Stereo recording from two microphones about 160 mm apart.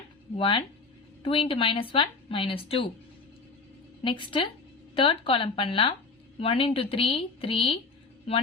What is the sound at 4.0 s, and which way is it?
Speech, 30° left (ahead or behind).